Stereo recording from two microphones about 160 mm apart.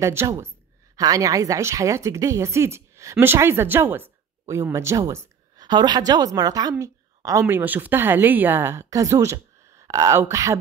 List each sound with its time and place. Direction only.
0.0 s a woman's voice: 15° right (ahead or behind)